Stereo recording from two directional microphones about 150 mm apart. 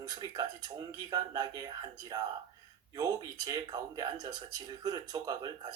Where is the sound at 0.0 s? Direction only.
25° right (ahead or behind).